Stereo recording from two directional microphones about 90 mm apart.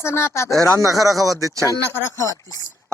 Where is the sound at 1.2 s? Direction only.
35° right (ahead or behind).